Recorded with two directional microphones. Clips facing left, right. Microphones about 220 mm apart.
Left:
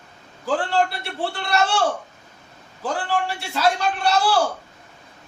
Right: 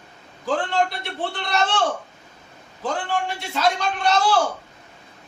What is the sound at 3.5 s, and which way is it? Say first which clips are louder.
Speech: left 1 dB; 10° left (ahead or behind).